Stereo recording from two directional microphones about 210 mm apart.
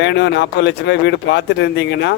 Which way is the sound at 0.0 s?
60° left (ahead or behind).